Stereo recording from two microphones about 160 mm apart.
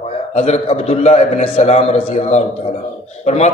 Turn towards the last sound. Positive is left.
turn(degrees=45)  # may be behind; listen again after turning